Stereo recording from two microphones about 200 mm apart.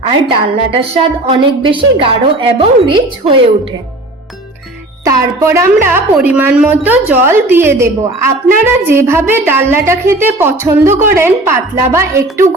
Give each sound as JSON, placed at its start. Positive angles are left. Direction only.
{"t": 0.0, "sound": "a woman's voice", "side_deg": -30}
{"t": 5.0, "sound": "speech", "side_deg": -15}